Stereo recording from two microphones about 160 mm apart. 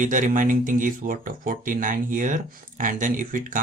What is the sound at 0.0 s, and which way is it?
Speech, 55° right (ahead or behind).